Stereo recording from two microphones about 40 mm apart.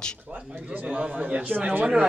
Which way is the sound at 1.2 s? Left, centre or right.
Right.